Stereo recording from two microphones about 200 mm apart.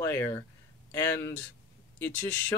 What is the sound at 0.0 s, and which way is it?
Speech, 10° left (ahead or behind).